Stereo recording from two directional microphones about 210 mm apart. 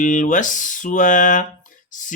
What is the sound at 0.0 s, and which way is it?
Mantra, 35° left (ahead or behind).